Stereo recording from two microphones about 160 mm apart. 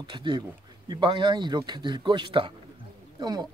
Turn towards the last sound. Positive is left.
turn(degrees=-25)  # may be behind; listen again after turning